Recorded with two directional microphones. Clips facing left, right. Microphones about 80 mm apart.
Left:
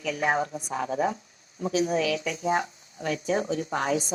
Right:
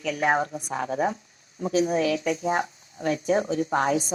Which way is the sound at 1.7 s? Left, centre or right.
Right.